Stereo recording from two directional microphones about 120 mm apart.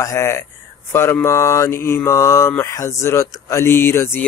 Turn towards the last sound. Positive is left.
turn(degrees=20)  # may be behind; listen again after turning